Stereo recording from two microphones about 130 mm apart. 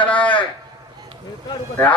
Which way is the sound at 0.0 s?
10° left (ahead or behind).